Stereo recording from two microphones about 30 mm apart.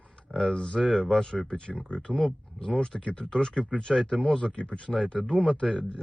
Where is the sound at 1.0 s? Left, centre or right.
Left.